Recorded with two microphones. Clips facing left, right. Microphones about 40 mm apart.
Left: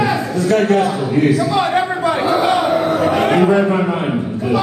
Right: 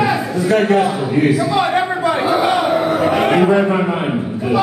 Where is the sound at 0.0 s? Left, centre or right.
Centre.